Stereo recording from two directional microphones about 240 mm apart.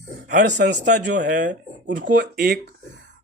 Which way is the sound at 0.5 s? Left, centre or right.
Right.